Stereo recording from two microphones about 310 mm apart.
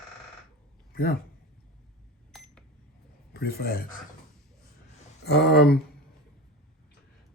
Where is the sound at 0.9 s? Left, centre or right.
Left.